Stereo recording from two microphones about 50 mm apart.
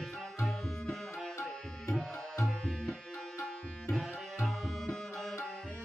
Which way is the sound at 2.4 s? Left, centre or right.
Centre.